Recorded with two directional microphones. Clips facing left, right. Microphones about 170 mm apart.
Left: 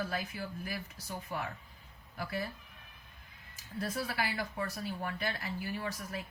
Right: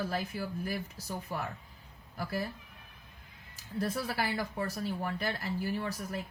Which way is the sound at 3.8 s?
40° right (ahead or behind).